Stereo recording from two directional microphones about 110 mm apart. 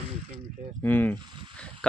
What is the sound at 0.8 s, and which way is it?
Speech, 15° left (ahead or behind).